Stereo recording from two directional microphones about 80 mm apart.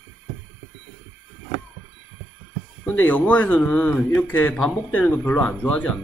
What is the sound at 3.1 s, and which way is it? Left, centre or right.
A man's voice, left.